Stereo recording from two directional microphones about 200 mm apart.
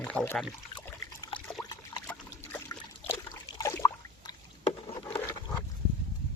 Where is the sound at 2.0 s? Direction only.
10° left (ahead or behind).